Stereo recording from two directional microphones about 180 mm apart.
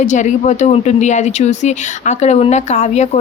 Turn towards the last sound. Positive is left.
turn(degrees=40)  # may be behind; listen again after turning